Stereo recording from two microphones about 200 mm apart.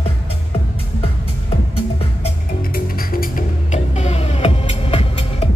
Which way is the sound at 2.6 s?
45° left (ahead or behind).